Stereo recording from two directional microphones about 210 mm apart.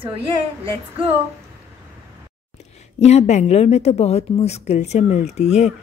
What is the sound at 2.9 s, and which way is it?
Speech, 30° left (ahead or behind).